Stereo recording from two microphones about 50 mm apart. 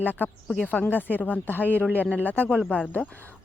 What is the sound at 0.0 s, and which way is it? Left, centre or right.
Speech, left.